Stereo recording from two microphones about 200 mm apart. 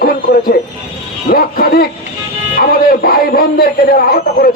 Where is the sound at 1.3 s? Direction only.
50° left (ahead or behind).